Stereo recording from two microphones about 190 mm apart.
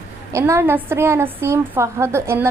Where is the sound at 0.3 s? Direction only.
15° right (ahead or behind).